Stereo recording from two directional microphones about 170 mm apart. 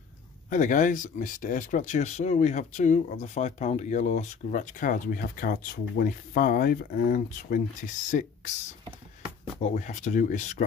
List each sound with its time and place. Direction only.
0.5 s speech: 50° left (ahead or behind)
9.6 s speech: 45° left (ahead or behind)